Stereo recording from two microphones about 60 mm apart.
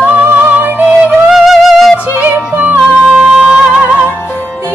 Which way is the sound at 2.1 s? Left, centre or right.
Right.